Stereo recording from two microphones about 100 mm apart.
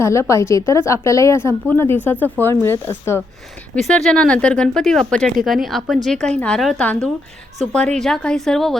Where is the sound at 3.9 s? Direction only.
10° left (ahead or behind).